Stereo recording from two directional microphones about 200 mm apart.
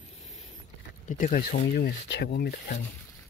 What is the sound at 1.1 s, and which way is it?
Speech, 40° left (ahead or behind).